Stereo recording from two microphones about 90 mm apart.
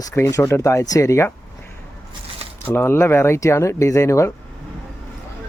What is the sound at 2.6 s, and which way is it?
Speech, 25° left (ahead or behind).